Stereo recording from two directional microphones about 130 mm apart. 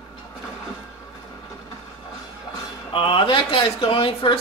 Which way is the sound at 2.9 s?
40° left (ahead or behind).